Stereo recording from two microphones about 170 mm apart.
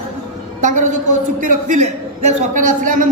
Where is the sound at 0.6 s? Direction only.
45° right (ahead or behind).